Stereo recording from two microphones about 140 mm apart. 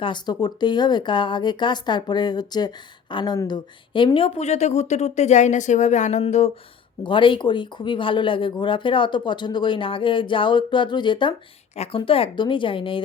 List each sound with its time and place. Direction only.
0.0 s speech: 30° left (ahead or behind)
4.4 s speech: 55° left (ahead or behind)
7.0 s speech: 35° left (ahead or behind)